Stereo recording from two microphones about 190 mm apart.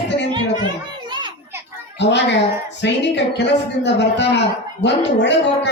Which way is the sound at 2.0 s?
65° left (ahead or behind).